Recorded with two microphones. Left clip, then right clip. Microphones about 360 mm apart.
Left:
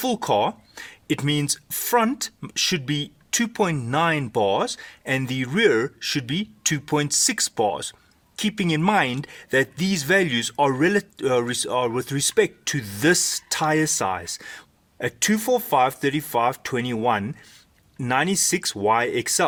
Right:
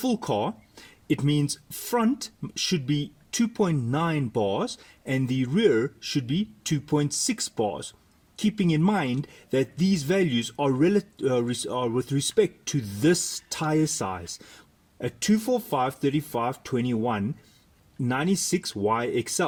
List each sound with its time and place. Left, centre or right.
0.1 s speech: left
7.5 s speech: left
8.4 s speech: left
10.5 s speech: left
11.7 s speech: left
11.9 s speech: left
18.0 s speech: left